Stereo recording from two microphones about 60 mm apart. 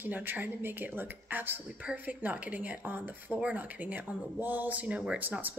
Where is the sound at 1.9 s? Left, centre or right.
Right.